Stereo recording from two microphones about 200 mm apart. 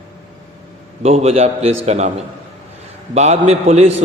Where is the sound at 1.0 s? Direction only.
30° right (ahead or behind).